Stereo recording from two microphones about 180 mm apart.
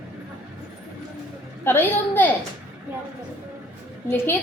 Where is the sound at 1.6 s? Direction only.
10° left (ahead or behind).